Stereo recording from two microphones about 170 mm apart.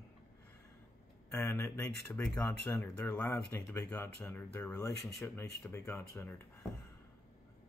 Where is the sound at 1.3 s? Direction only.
15° left (ahead or behind).